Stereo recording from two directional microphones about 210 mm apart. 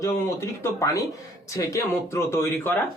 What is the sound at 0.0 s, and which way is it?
Speech, 15° left (ahead or behind).